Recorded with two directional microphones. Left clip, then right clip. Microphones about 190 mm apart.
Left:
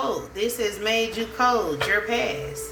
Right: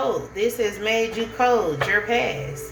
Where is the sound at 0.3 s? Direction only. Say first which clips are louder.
Right 3 dB; 20° left (ahead or behind).